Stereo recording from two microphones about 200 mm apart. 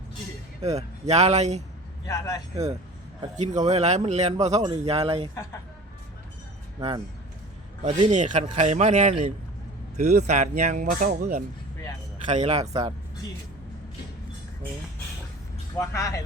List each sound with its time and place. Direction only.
0.6 s speech: 35° right (ahead or behind)
2.0 s speech: 15° left (ahead or behind)
3.3 s a man's voice: 35° right (ahead or behind)
6.7 s a man's voice: 20° right (ahead or behind)
8.1 s speech: 40° right (ahead or behind)
15.8 s speech: 15° left (ahead or behind)